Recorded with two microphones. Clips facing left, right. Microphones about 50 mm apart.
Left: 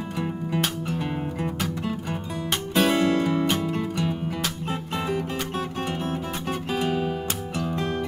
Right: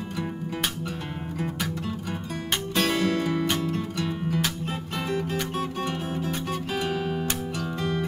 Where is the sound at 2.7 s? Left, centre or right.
Centre.